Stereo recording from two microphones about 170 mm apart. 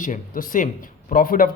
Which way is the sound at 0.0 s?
50° left (ahead or behind).